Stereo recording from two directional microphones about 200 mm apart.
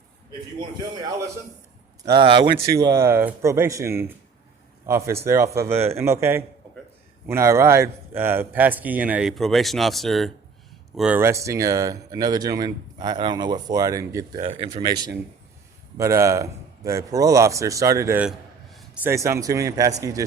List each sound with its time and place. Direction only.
2.0 s a man's voice: 25° right (ahead or behind); by 18.9 s centre (ahead or behind)
19.0 s speech: 15° right (ahead or behind)